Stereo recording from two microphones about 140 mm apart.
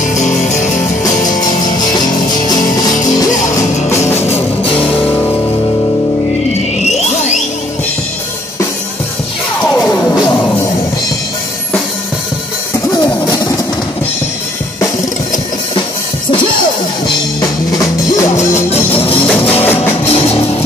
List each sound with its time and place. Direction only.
0.0 s music: 60° left (ahead or behind)
1.6 s music: 30° left (ahead or behind)
6.8 s music: 55° left (ahead or behind)
9.8 s music: 10° left (ahead or behind)
12.9 s a sound: 30° left (ahead or behind)
17.4 s music: 25° left (ahead or behind)
18.5 s music: 45° left (ahead or behind)
19.2 s music: 10° left (ahead or behind)
20.1 s music: 45° left (ahead or behind)